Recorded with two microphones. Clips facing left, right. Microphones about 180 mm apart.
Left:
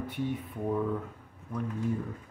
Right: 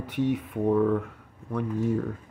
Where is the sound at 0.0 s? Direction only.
85° right.